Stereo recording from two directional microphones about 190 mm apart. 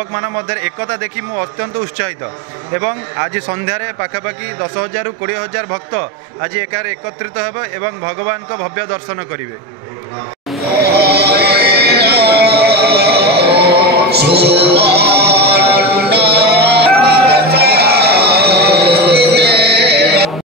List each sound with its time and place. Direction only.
0.1 s a man's voice: 20° right (ahead or behind)
10.8 s music: 55° right (ahead or behind)